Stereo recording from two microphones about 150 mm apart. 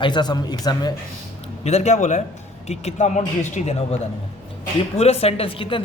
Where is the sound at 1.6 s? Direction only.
50° left (ahead or behind).